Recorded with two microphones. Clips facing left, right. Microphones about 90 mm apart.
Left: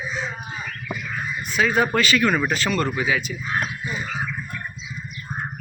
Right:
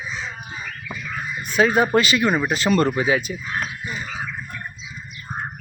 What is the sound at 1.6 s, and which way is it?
Speech, 40° right (ahead or behind).